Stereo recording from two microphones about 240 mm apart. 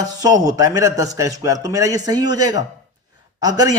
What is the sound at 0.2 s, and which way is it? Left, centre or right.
A man's voice, centre.